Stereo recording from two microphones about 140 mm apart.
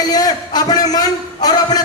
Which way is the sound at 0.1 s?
30° left (ahead or behind).